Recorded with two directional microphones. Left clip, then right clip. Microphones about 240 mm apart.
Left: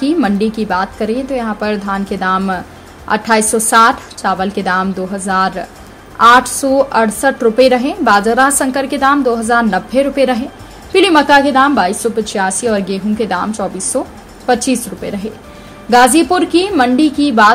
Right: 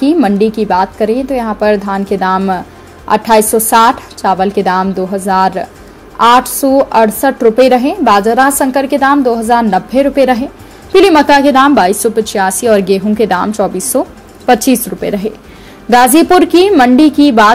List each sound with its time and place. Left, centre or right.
0.0 s a woman's voice: centre